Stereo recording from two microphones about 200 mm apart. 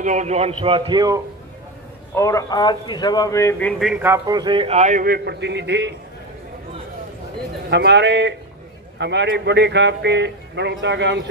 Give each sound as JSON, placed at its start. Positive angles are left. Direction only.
{"t": 0.0, "sound": "a man's voice", "side_deg": -35}
{"t": 2.1, "sound": "speech", "side_deg": 15}
{"t": 3.9, "sound": "a man's voice", "side_deg": -10}
{"t": 7.7, "sound": "a man's voice", "side_deg": -60}